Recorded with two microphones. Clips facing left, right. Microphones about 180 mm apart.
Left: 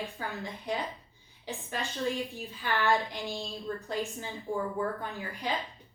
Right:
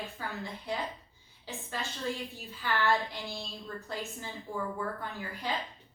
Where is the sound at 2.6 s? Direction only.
15° left (ahead or behind).